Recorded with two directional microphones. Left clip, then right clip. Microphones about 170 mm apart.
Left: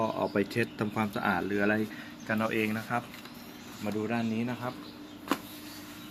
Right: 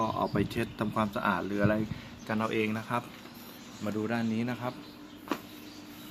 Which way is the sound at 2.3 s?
15° right (ahead or behind).